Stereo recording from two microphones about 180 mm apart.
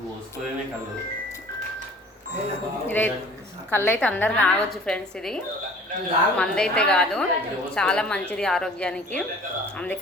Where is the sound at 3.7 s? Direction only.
10° left (ahead or behind).